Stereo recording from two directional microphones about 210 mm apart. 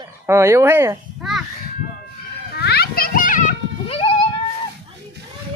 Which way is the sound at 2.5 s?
50° left (ahead or behind).